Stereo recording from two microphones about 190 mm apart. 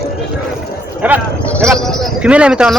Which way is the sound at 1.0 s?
10° right (ahead or behind).